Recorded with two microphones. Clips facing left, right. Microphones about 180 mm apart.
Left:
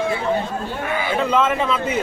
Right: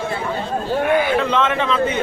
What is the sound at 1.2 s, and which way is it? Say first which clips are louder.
Speech: even; 5° left (ahead or behind).